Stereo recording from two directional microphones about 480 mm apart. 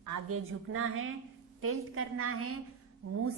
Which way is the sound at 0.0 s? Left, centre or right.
Right.